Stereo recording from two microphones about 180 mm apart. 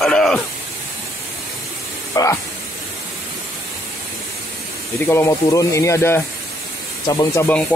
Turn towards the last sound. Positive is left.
turn(degrees=20)  # may be behind; listen again after turning